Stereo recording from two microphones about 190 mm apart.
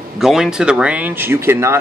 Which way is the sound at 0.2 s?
Centre (ahead or behind).